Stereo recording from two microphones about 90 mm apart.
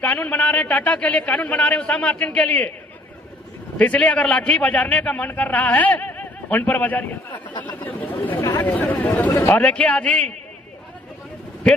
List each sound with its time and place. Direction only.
0.0 s a man's voice: 15° left (ahead or behind)
3.8 s a man's voice: 15° left (ahead or behind)